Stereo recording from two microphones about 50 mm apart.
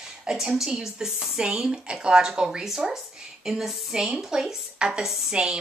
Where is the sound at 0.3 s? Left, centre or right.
Centre.